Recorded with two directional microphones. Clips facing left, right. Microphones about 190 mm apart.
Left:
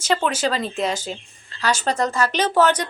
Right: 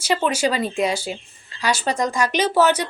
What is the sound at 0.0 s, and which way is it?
Speech, 10° right (ahead or behind).